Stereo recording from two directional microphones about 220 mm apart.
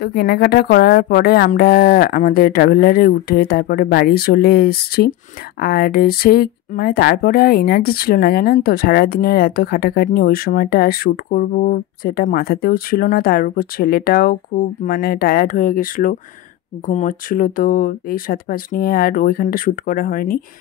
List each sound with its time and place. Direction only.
0.0 s speech: 45° left (ahead or behind)